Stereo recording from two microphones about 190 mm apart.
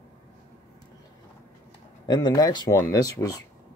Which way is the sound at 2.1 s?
20° left (ahead or behind).